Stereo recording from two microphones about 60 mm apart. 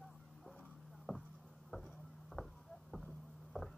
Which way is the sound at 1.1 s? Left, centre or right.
Centre.